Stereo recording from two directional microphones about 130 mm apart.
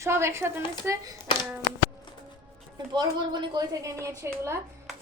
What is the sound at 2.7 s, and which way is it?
A woman's voice, 35° right (ahead or behind).